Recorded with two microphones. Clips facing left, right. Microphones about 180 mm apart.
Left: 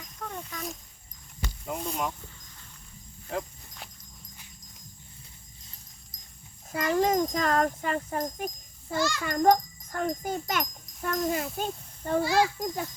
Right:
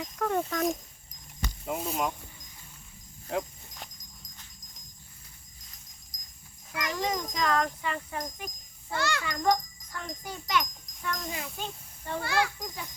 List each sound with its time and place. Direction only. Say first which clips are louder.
0.0 s speech: right 10 dB; 70° right (ahead or behind)
1.6 s speech: right 1 dB; 5° right (ahead or behind)
3.2 s music: right 2 dB; centre (ahead or behind)
6.1 s music: left 1 dB; 30° left (ahead or behind)
6.7 s speech: left 7 dB; 50° left (ahead or behind)
8.9 s a child's voice: left 2 dB; 60° right (ahead or behind)
9.2 s a child's voice: left 7 dB; 50° left (ahead or behind)
12.2 s a child's voice: left 4 dB; 60° right (ahead or behind)
12.5 s speech: left 8 dB; 50° left (ahead or behind)